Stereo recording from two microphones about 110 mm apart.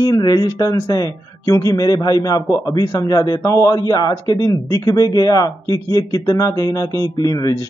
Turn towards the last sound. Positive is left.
turn(degrees=35)  # may be behind; listen again after turning